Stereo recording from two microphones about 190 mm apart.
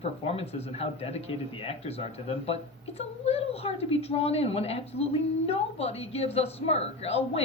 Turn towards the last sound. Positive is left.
turn(degrees=35)  # may be behind; listen again after turning